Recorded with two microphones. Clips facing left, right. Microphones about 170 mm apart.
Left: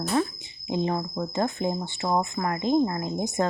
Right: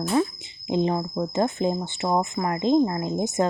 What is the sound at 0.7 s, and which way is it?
Speech, 20° right (ahead or behind).